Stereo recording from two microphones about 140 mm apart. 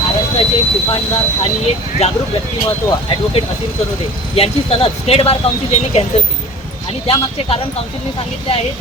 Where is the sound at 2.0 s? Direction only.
50° left (ahead or behind).